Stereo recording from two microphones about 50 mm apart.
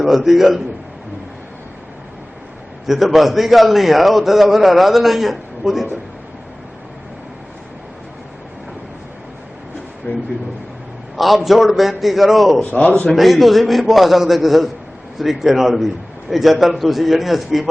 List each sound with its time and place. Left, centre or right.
0.0 s a man's voice: centre
2.8 s a man's voice: centre
10.1 s speech: left
11.2 s a man's voice: centre